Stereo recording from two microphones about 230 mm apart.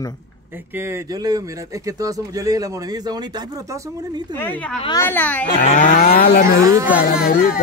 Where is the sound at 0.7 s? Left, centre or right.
Centre.